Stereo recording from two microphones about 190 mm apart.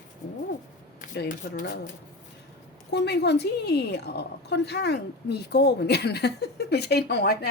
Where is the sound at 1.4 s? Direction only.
55° left (ahead or behind).